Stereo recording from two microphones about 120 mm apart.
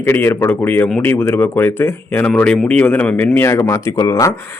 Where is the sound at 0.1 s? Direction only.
20° left (ahead or behind).